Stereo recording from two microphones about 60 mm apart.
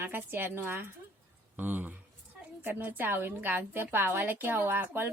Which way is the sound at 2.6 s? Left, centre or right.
Right.